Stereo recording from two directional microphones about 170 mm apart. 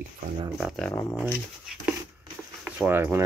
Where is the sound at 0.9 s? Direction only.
15° left (ahead or behind).